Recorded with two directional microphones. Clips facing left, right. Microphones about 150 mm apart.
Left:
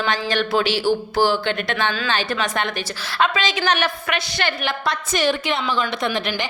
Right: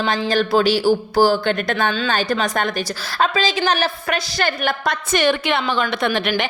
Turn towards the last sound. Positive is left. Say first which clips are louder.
# right 4 dB
turn(degrees=-60)  # may be behind; listen again after turning